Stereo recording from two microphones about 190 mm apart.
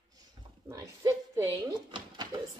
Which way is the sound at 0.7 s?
15° right (ahead or behind).